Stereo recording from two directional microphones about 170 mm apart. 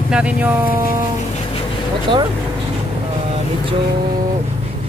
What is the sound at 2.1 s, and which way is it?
Speech, 30° right (ahead or behind).